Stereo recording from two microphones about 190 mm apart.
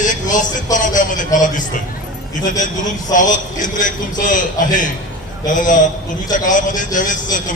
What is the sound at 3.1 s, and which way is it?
Speech, 40° left (ahead or behind).